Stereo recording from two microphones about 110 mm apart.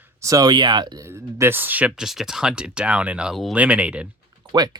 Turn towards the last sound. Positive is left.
turn(degrees=-40)  # may be behind; listen again after turning